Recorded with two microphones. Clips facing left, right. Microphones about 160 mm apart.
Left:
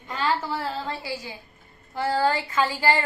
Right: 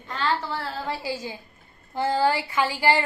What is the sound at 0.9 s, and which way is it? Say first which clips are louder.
A woman's voice: right 3 dB; 15° right (ahead or behind).